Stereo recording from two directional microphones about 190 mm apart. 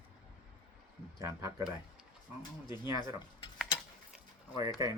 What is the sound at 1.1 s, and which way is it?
Speech, 20° right (ahead or behind).